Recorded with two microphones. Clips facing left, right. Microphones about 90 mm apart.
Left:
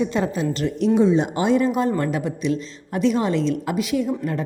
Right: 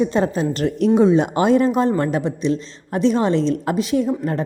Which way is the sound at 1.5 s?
35° right (ahead or behind).